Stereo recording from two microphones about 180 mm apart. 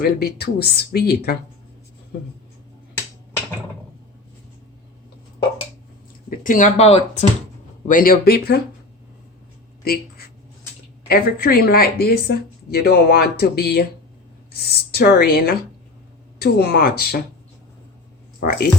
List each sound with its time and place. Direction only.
0.0 s speech: 60° left (ahead or behind)
6.4 s speech: 45° left (ahead or behind)
7.9 s speech: 50° left (ahead or behind)
9.8 s a sound: 55° left (ahead or behind)
11.1 s speech: 55° left (ahead or behind)
18.3 s speech: 60° left (ahead or behind)